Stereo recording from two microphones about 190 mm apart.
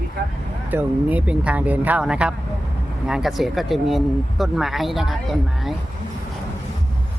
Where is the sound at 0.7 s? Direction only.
10° right (ahead or behind).